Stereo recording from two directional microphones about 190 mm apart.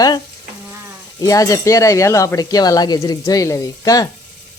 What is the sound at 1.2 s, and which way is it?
Speech, 20° left (ahead or behind).